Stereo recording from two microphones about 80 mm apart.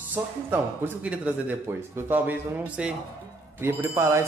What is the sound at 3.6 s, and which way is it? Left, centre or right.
Speech, right.